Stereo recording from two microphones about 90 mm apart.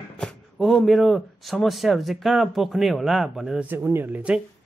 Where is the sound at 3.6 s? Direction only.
25° right (ahead or behind).